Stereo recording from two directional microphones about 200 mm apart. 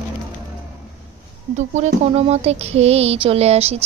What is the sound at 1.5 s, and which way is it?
Child singing, 35° right (ahead or behind).